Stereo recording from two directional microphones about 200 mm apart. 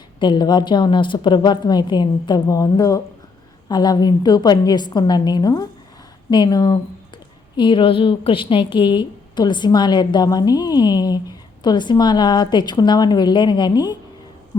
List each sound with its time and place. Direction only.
0.2 s a woman's voice: 20° left (ahead or behind)